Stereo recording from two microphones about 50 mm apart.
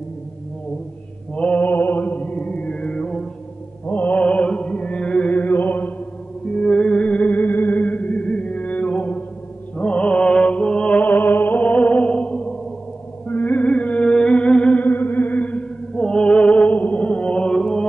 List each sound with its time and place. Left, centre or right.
1.3 s mantra: left
3.8 s music: left
6.4 s music: centre
11.0 s music: left
13.3 s music: left
14.8 s music: left
15.9 s music: centre